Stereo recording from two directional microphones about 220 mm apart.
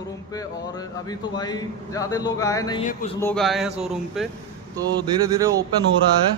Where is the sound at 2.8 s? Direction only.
35° left (ahead or behind).